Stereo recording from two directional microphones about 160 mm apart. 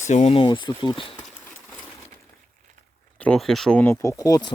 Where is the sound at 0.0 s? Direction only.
45° left (ahead or behind).